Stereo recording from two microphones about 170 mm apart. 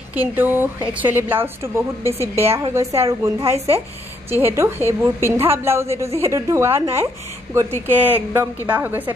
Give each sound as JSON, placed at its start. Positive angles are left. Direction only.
{"t": 0.1, "sound": "a woman's voice", "side_deg": -10}